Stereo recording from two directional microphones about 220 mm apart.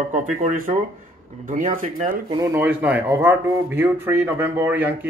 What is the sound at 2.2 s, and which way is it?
Speech, 10° right (ahead or behind).